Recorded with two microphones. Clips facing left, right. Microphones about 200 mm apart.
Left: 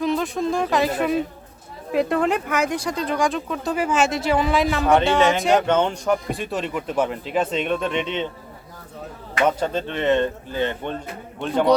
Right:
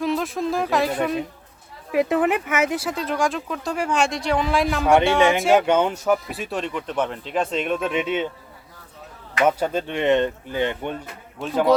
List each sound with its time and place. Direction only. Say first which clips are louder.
0.0 s speech: left 1 dB; centre (ahead or behind)
5.1 s speech: even; 15° right (ahead or behind)
5.4 s speech: right 1 dB; centre (ahead or behind)
9.5 s speech: right 1 dB; 10° right (ahead or behind)
11.3 s speech: left 1 dB; centre (ahead or behind)